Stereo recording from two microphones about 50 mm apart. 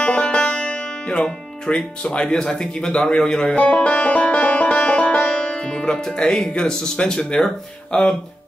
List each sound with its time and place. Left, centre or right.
0.0 s music: left
2.4 s a man's voice: centre
3.5 s music: left